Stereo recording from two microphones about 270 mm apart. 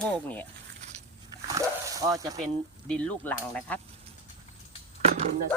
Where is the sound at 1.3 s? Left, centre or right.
Centre.